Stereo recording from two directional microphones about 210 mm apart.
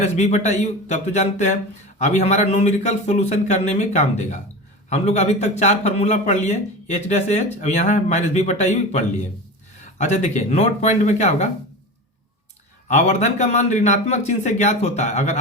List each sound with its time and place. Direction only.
0.0 s speech: 35° left (ahead or behind)
12.9 s speech: 35° left (ahead or behind)